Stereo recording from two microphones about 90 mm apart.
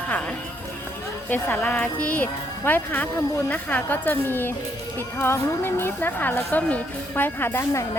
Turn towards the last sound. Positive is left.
turn(degrees=25)  # may be behind; listen again after turning